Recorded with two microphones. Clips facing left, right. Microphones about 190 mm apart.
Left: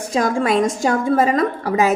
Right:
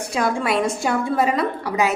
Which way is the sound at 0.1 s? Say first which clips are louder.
Left 4 dB; 40° left (ahead or behind).